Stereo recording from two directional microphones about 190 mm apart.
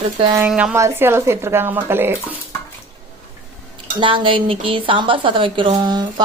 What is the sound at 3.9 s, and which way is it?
Speech, 25° right (ahead or behind).